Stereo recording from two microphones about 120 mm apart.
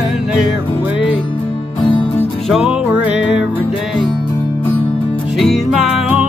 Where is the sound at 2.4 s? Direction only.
Centre (ahead or behind).